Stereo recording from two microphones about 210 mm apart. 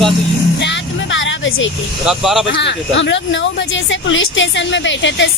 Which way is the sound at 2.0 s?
Centre (ahead or behind).